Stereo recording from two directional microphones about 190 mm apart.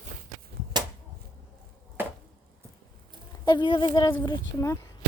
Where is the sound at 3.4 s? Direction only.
25° left (ahead or behind).